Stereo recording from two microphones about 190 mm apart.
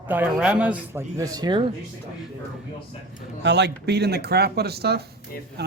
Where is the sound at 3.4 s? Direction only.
65° right (ahead or behind).